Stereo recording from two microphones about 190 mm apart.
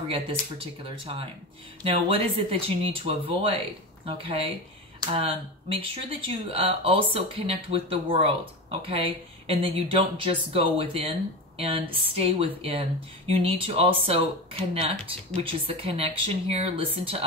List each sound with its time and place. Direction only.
0.8 s speech: 30° right (ahead or behind)